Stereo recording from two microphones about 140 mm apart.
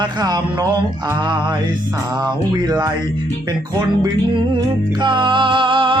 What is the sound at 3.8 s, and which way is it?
Music, 30° right (ahead or behind).